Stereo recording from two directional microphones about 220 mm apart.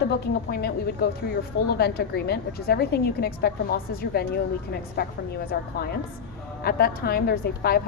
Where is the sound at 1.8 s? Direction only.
45° left (ahead or behind).